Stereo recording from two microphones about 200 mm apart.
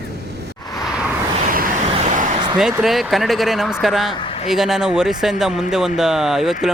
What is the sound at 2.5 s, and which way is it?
Speech, 5° right (ahead or behind).